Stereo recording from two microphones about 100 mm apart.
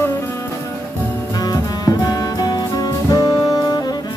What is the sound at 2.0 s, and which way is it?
Saxophone, 40° left (ahead or behind).